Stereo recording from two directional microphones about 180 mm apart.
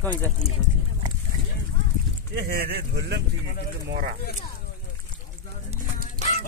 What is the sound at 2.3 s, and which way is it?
Speech, 60° right (ahead or behind).